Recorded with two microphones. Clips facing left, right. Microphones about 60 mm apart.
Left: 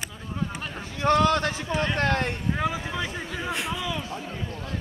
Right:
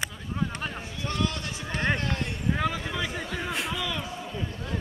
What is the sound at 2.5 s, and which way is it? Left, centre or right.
Vehicle, centre.